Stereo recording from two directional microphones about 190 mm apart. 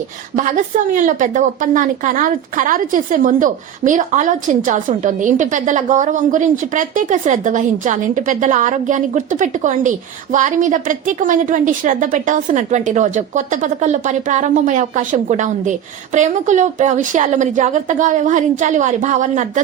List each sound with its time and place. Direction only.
0.3 s a woman's voice: 40° right (ahead or behind)